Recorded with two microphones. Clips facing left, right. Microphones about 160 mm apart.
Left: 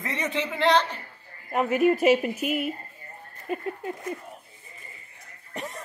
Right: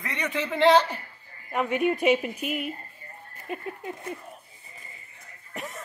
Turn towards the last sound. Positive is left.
turn(degrees=0)  # may be behind; listen again after turning